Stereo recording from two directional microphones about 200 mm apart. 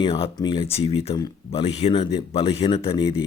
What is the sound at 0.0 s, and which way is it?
Speech, 25° left (ahead or behind).